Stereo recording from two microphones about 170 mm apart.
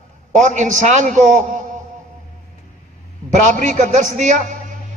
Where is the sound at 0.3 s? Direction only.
45° right (ahead or behind).